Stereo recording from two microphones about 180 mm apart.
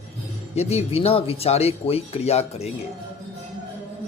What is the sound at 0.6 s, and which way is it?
A man's voice, 35° left (ahead or behind).